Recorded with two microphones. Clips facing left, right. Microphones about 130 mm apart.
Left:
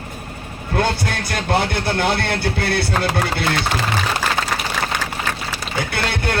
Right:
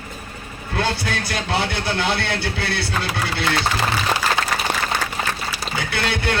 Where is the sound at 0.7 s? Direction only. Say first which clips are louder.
Left 3 dB; 50° left (ahead or behind).